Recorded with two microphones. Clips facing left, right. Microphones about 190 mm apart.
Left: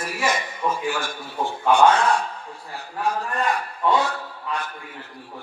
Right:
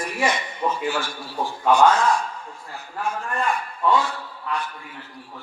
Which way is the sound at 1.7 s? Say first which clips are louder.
Even; 30° left (ahead or behind).